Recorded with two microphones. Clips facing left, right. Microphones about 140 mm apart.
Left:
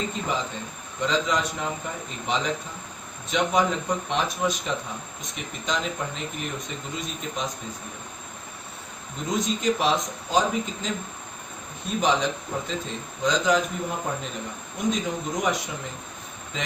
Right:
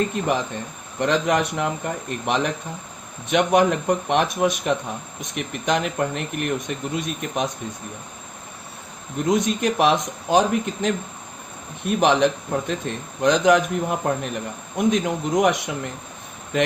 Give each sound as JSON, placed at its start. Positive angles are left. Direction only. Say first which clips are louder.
{"t": 0.0, "sound": "speech", "louder": "right 6 dB", "side_deg": -60}
{"t": 9.3, "sound": "speech", "louder": "right 3 dB", "side_deg": -60}